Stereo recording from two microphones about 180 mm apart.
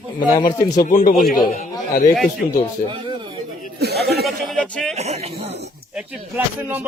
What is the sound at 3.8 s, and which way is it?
Speech, 65° right (ahead or behind).